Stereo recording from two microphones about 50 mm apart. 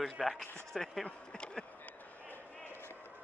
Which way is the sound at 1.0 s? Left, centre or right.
Centre.